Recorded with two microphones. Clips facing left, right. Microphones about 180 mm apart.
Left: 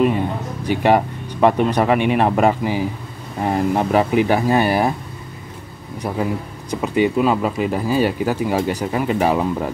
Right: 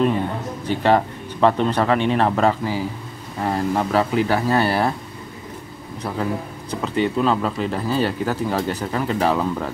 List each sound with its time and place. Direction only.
0.0 s speech: 10° left (ahead or behind)
6.0 s speech: 15° left (ahead or behind)